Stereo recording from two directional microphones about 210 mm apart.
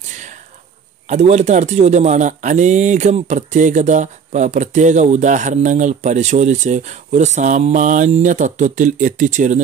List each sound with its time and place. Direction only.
1.0 s a man's voice: 35° right (ahead or behind)